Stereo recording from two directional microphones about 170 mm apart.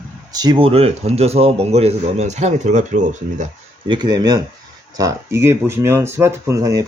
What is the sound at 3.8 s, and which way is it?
Speech, 25° right (ahead or behind).